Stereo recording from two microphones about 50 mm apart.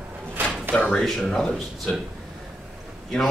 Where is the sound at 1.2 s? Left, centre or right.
Centre.